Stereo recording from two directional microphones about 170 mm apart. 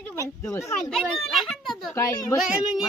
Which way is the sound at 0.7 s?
5° left (ahead or behind).